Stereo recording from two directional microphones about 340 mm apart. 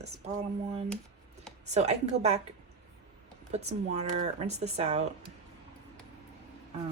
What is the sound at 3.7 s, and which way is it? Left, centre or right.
Speech, centre.